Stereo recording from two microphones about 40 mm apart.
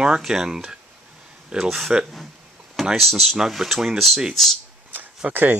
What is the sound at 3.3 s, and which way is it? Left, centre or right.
Speech, centre.